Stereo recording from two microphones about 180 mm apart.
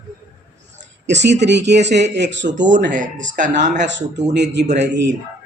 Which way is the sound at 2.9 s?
45° right (ahead or behind).